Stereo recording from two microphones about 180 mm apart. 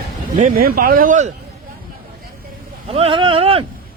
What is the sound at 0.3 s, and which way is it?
Speech, 50° right (ahead or behind).